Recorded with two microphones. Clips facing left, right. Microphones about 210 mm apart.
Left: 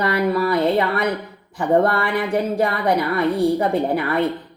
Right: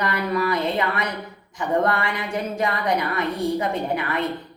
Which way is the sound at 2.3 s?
35° left (ahead or behind).